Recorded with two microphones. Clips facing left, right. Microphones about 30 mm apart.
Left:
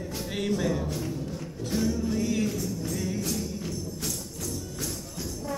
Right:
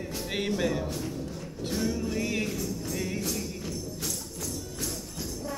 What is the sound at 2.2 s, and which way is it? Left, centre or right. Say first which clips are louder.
Music: left 3 dB; right.